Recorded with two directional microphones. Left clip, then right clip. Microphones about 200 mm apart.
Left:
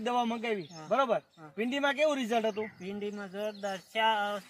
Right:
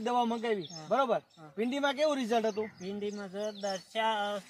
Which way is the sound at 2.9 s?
15° right (ahead or behind).